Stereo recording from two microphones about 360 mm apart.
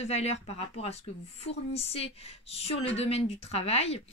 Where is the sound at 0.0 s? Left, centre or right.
Centre.